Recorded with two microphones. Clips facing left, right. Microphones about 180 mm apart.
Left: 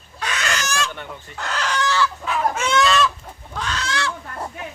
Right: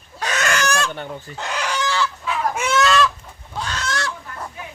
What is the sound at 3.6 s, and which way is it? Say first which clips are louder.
Chicken: even; 40° right (ahead or behind).